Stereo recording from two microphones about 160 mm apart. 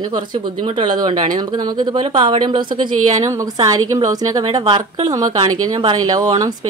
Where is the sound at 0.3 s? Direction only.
30° right (ahead or behind).